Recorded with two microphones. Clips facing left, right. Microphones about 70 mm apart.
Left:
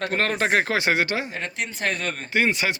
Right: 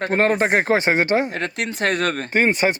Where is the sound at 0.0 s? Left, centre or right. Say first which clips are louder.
Right 5 dB; right.